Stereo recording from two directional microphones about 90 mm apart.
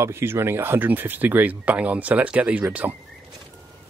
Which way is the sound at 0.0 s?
25° right (ahead or behind).